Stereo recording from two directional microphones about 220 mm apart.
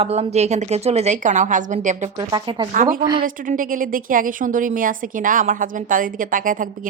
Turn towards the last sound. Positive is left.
turn(degrees=-40)  # may be behind; listen again after turning